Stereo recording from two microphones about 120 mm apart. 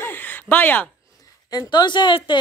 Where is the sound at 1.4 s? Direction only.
35° left (ahead or behind).